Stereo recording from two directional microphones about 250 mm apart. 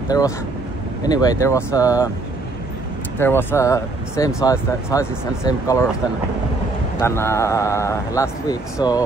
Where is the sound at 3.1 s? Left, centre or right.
Centre.